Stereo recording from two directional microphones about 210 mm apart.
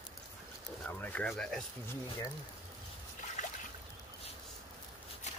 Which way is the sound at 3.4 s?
35° left (ahead or behind).